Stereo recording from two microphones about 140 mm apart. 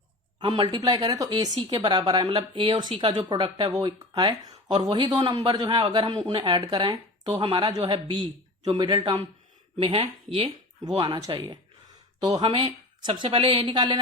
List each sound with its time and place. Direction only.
0.3 s speech: 35° right (ahead or behind)
10.5 s speech: 30° right (ahead or behind)